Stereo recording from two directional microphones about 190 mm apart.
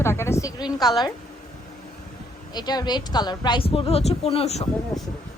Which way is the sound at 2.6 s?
20° left (ahead or behind).